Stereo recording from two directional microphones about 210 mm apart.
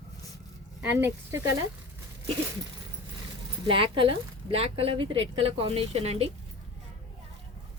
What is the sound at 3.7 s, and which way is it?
A woman's voice, 25° right (ahead or behind).